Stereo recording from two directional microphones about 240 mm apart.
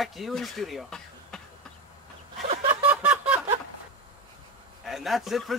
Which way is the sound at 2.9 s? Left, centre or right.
Centre.